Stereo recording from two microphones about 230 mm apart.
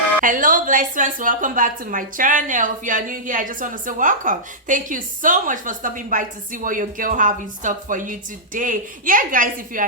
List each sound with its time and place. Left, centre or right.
0.2 s a woman's voice: right